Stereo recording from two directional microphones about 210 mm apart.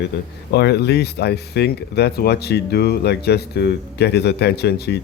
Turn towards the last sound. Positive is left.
turn(degrees=50)  # may be behind; listen again after turning